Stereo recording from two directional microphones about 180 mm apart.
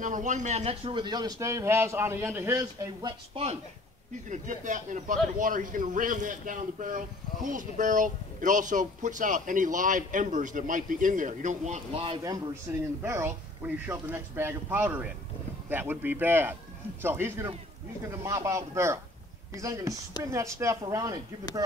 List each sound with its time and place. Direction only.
0.0 s a man's voice: 45° right (ahead or behind); by 3.1 s 15° right (ahead or behind)
3.1 s speech: 35° right (ahead or behind)
4.3 s a man's voice: 45° right (ahead or behind)
13.0 s a man's voice: 15° right (ahead or behind)